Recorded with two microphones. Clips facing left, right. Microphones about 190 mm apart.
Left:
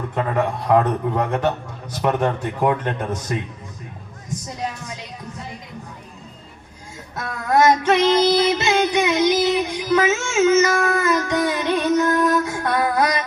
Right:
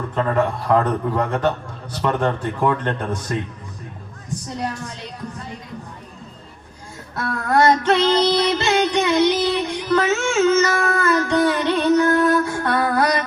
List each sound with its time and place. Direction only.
0.1 s music: 15° left (ahead or behind)
7.2 s music: 15° left (ahead or behind)